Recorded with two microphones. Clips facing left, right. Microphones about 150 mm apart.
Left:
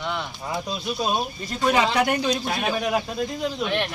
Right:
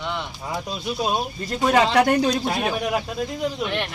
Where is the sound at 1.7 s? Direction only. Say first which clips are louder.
Right 4 dB; 40° right (ahead or behind).